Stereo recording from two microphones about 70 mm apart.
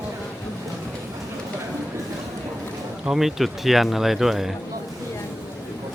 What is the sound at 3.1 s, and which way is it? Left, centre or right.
Speech, centre.